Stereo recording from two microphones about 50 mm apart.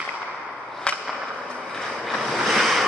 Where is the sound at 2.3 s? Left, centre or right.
Centre.